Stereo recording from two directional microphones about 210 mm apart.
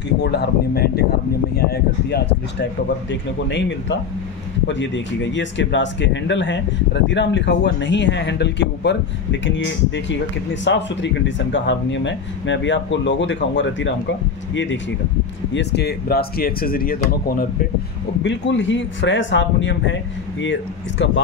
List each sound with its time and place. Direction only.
0.2 s speech: 50° left (ahead or behind)
18.2 s speech: 55° left (ahead or behind)